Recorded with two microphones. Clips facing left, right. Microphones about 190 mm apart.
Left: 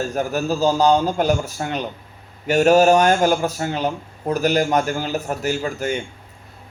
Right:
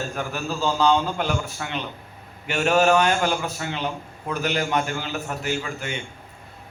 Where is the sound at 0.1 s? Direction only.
40° left (ahead or behind).